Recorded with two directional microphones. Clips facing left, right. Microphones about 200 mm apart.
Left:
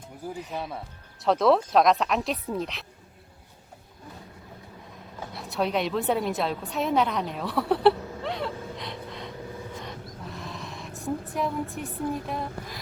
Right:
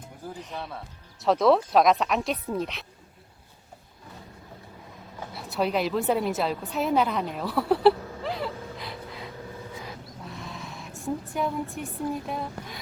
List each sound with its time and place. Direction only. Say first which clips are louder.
0.5 s speech: left 2 dB; 15° left (ahead or behind)
1.2 s speech: right 1 dB; centre (ahead or behind)
5.3 s a woman's voice: right 1 dB; centre (ahead or behind)
9.7 s a sound: left 1 dB; 5° right (ahead or behind)